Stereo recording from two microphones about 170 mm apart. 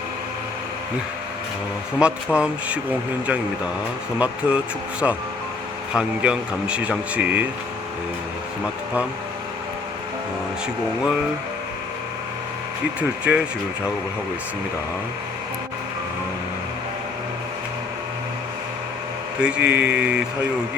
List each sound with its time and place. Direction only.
2.0 s speech: 5° right (ahead or behind)
13.0 s speech: 5° right (ahead or behind)
19.4 s speech: 5° right (ahead or behind)